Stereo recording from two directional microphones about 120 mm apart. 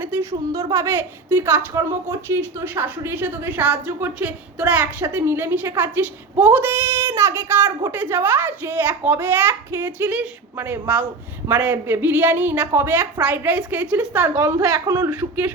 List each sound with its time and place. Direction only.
0.0 s a woman's voice: 20° right (ahead or behind)